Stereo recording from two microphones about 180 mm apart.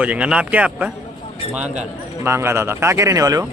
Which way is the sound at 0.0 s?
5° right (ahead or behind).